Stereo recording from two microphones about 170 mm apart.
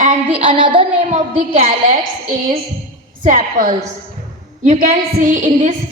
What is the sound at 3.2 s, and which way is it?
A woman's voice, 50° right (ahead or behind).